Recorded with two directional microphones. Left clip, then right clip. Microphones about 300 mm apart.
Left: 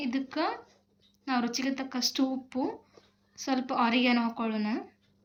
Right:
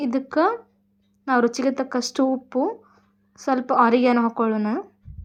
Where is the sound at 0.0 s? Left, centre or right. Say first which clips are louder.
Right 10 dB; centre.